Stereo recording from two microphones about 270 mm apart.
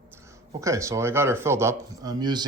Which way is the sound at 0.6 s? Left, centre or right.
Centre.